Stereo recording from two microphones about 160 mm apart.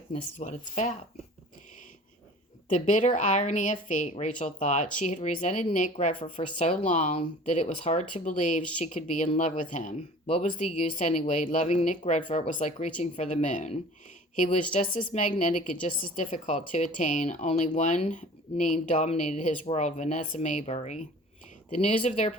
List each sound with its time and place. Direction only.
0.1 s a woman's voice: 50° left (ahead or behind)
2.6 s a woman's voice: 50° left (ahead or behind)